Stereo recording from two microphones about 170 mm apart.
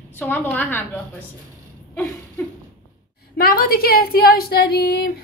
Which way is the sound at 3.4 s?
65° left (ahead or behind).